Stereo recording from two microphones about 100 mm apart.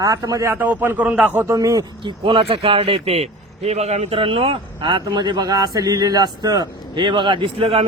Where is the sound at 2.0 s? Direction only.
55° right (ahead or behind).